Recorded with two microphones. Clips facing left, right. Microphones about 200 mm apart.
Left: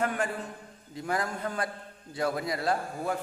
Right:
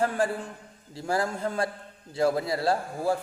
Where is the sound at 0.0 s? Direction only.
30° right (ahead or behind).